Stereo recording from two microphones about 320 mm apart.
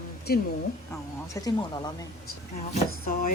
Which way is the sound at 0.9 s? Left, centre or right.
Centre.